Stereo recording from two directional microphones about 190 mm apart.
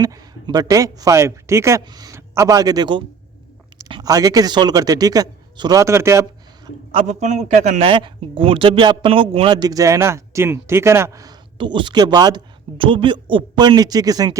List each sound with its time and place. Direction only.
0.0 s a man's voice: 20° right (ahead or behind)
6.9 s a man's voice: 35° right (ahead or behind); by 14.3 s 20° right (ahead or behind)